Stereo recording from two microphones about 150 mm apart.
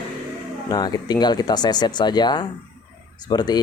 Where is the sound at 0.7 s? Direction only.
25° left (ahead or behind).